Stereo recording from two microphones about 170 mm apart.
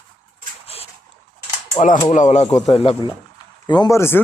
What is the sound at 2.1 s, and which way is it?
A man's voice, 40° left (ahead or behind).